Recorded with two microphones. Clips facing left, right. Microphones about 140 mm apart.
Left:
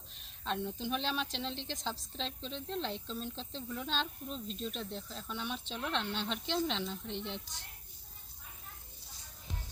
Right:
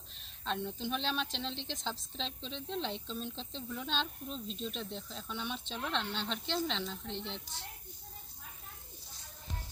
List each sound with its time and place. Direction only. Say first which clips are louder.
0.1 s a woman's voice: even; 5° left (ahead or behind)